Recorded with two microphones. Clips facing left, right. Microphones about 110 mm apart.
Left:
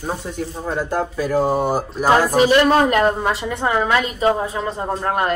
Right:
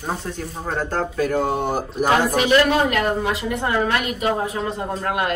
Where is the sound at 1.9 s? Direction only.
35° left (ahead or behind).